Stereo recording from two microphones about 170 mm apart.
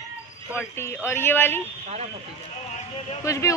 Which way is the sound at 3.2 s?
20° left (ahead or behind).